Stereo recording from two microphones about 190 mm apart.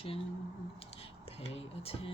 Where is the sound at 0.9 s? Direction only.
30° left (ahead or behind).